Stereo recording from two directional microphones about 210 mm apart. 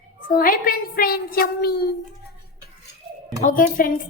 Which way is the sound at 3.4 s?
40° left (ahead or behind).